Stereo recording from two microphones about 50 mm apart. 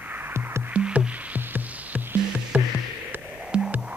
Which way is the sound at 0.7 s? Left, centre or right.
Right.